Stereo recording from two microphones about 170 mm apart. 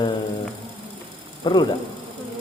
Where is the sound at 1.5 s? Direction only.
25° left (ahead or behind).